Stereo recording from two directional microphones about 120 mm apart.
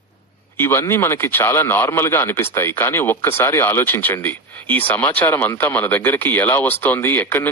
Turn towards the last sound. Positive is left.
turn(degrees=15)  # may be behind; listen again after turning